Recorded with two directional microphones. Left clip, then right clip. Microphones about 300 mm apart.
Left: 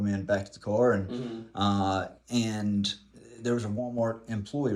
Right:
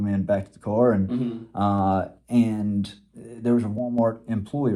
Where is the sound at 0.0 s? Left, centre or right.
Centre.